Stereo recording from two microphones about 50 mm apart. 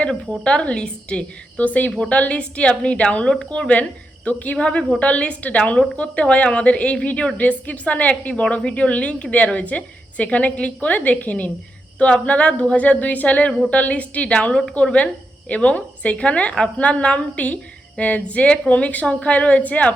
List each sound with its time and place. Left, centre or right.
0.4 s a woman's voice: centre
4.5 s a woman's voice: centre